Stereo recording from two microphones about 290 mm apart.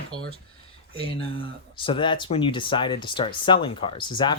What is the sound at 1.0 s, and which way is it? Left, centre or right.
Speech, centre.